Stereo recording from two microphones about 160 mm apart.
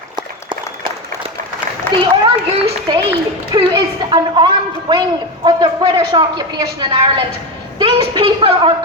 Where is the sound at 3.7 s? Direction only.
25° right (ahead or behind).